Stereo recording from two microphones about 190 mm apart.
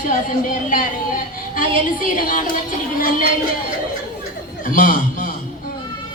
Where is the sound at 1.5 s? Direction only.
45° left (ahead or behind).